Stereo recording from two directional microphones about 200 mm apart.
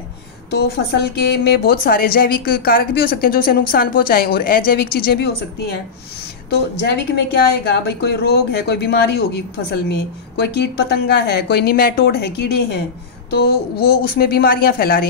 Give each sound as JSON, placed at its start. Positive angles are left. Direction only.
{"t": 0.5, "sound": "speech", "side_deg": 55}